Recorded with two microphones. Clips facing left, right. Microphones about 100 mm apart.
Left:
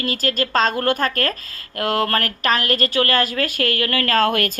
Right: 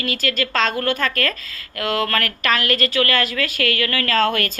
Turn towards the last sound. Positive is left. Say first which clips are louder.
# left 1 dB
turn(degrees=50)  # may be behind; listen again after turning